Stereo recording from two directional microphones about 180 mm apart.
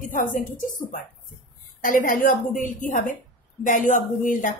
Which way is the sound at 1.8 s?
50° left (ahead or behind).